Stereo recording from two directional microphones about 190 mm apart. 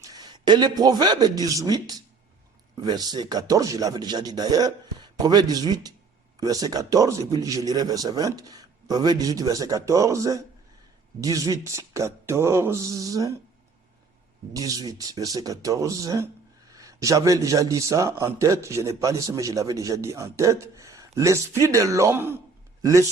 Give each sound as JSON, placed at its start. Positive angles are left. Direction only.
{"t": 0.0, "sound": "a man's voice", "side_deg": -20}
{"t": 14.5, "sound": "speech", "side_deg": -20}